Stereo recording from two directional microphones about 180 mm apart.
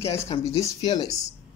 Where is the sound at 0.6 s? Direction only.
20° left (ahead or behind).